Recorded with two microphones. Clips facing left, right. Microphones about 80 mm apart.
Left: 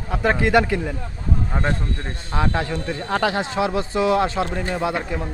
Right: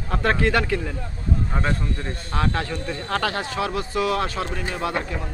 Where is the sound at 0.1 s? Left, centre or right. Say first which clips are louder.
Left 3 dB; centre.